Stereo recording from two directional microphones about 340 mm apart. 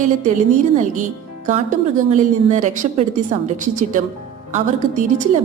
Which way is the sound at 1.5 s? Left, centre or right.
Right.